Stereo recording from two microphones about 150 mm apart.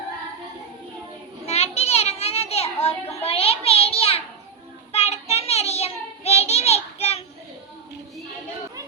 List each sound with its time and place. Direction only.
1.5 s children playing: 45° left (ahead or behind)
3.2 s a sound: 40° left (ahead or behind)
4.9 s child singing: 45° left (ahead or behind)